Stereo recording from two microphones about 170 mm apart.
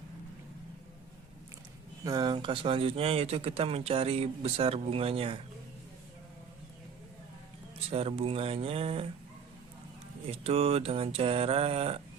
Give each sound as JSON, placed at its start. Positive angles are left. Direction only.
{"t": 2.0, "sound": "speech", "side_deg": -25}
{"t": 7.9, "sound": "speech", "side_deg": -35}
{"t": 10.2, "sound": "speech", "side_deg": -35}